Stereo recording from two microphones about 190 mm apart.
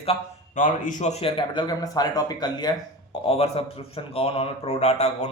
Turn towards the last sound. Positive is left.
turn(degrees=35)  # may be behind; listen again after turning